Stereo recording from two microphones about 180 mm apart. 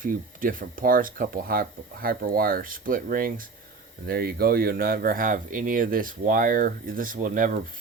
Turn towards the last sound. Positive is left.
turn(degrees=-50)  # may be behind; listen again after turning